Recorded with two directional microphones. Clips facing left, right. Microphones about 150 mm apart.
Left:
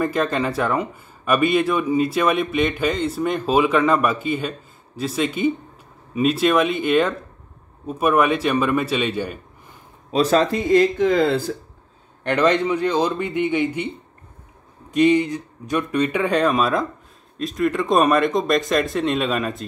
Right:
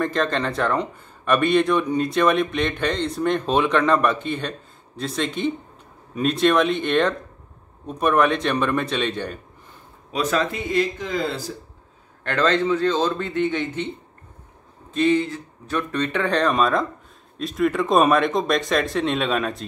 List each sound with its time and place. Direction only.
0.0 s speech: 10° left (ahead or behind)
10.1 s speech: 30° left (ahead or behind)
11.0 s speech: 60° left (ahead or behind)
12.2 s speech: 15° left (ahead or behind)
14.9 s speech: 15° left (ahead or behind)